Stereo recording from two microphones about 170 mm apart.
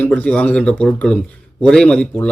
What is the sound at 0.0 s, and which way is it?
A man's voice, 10° left (ahead or behind).